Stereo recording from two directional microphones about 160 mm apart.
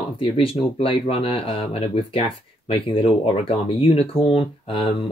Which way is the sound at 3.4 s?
35° left (ahead or behind).